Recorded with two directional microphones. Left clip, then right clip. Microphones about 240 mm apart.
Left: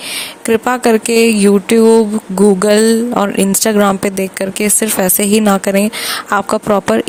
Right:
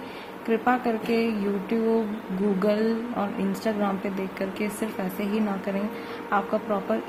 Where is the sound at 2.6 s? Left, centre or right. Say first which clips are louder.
Left 14 dB; left.